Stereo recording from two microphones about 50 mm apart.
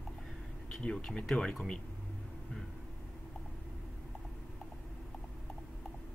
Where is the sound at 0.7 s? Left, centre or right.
Centre.